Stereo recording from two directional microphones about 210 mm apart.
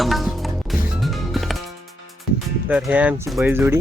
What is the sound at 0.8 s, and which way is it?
Music, centre (ahead or behind).